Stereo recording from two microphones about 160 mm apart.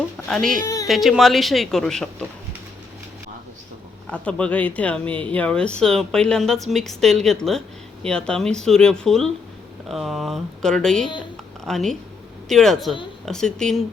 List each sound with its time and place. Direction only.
0.3 s speech: 5° left (ahead or behind)
4.0 s speech: 5° left (ahead or behind)